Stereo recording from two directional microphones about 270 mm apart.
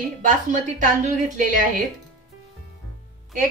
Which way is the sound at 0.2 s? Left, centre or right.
Right.